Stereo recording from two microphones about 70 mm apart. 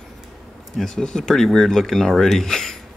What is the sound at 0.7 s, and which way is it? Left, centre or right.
Speech, centre.